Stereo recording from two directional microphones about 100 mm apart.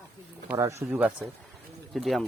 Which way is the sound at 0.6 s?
30° right (ahead or behind).